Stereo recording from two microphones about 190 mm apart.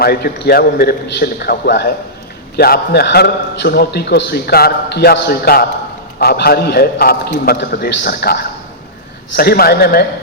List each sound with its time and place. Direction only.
0.0 s a man's voice: 55° left (ahead or behind)